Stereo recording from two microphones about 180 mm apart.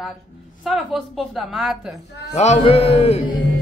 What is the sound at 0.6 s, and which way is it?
A man's voice, centre (ahead or behind).